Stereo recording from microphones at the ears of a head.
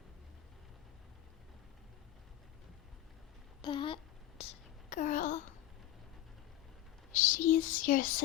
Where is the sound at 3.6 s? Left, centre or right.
Left.